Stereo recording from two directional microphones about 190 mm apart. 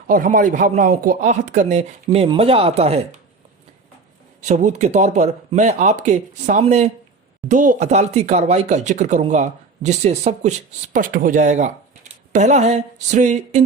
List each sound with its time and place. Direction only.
0.1 s speech: 45° right (ahead or behind)
4.4 s speech: 40° right (ahead or behind)
10.9 s speech: 45° right (ahead or behind)